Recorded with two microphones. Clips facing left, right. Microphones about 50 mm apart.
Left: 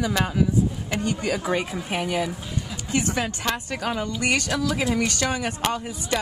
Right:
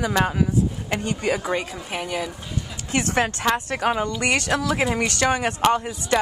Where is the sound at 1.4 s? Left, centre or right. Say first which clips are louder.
Left 1 dB; centre.